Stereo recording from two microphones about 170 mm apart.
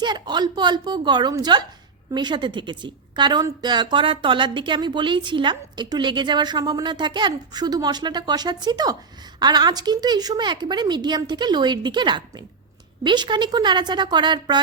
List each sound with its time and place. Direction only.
0.0 s a woman's voice: 25° right (ahead or behind)